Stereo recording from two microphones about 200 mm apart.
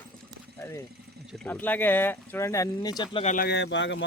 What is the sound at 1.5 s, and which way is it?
Speech, 10° left (ahead or behind).